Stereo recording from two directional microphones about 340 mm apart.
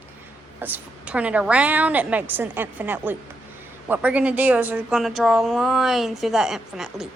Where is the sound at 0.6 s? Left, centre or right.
Centre.